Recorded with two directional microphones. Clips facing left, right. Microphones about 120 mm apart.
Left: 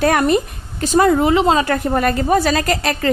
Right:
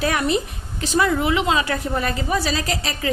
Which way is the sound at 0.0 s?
50° left (ahead or behind).